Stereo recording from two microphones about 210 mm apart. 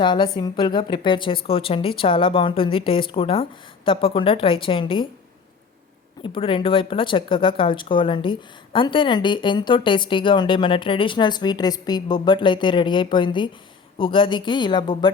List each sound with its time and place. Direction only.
0.0 s speech: 20° left (ahead or behind)
6.2 s speech: 25° left (ahead or behind)